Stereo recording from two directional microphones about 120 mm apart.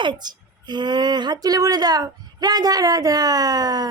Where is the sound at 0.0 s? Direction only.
40° right (ahead or behind).